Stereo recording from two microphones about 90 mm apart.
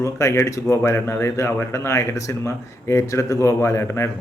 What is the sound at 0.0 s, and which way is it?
Speech, 35° left (ahead or behind).